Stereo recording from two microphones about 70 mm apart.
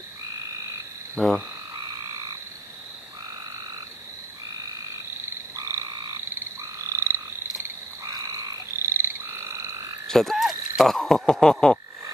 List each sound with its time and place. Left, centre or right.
1.2 s frog: centre
1.8 s frog: right
5.6 s frog: right
8.0 s frog: right
8.8 s croak: right
10.0 s speech: centre